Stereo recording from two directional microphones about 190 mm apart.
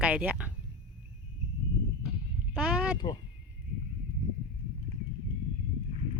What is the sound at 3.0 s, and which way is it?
Speech, 25° left (ahead or behind).